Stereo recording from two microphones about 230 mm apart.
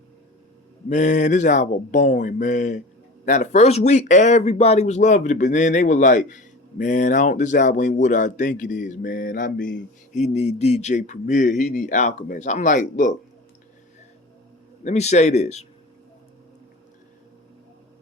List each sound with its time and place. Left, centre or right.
0.9 s speech: left
14.8 s speech: left